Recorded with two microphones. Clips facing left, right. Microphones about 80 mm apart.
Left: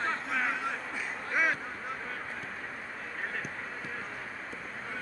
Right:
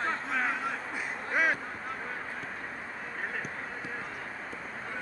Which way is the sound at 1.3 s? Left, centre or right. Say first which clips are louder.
Right 1 dB; right.